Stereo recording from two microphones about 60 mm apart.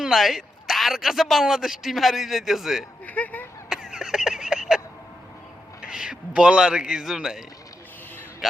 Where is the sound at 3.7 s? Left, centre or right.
Centre.